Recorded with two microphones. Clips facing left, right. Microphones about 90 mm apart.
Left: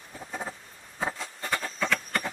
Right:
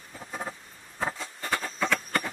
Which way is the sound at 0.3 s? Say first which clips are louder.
Even; centre (ahead or behind).